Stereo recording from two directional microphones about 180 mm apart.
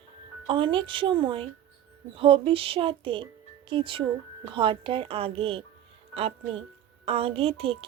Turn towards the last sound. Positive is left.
turn(degrees=-35)  # may be behind; listen again after turning